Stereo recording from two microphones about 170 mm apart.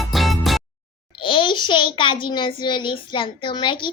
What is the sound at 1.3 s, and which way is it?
A child's voice, 30° left (ahead or behind).